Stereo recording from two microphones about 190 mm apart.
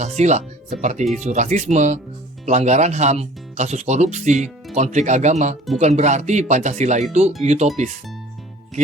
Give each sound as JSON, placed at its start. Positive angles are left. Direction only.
{"t": 0.0, "sound": "speech", "side_deg": -35}